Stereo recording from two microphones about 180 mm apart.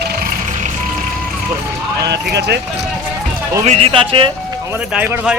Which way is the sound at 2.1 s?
70° right (ahead or behind).